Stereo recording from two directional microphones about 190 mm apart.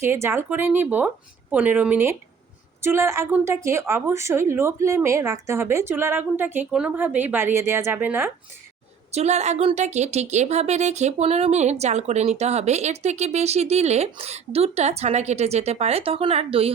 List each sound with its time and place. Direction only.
0.0 s a woman's voice: 15° right (ahead or behind)
9.1 s a woman's voice: 35° right (ahead or behind)